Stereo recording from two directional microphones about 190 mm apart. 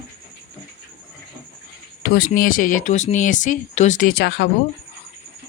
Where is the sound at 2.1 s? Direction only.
50° left (ahead or behind).